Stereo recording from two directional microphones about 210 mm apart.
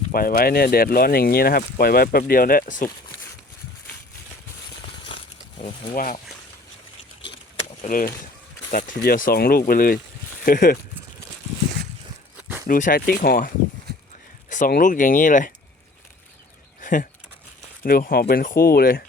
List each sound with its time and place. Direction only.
0.1 s speech: 45° left (ahead or behind)
5.6 s speech: 40° left (ahead or behind)
7.9 s speech: 40° left (ahead or behind)
12.6 s speech: 40° left (ahead or behind)
14.5 s speech: 40° left (ahead or behind)
16.8 s speech: 40° left (ahead or behind)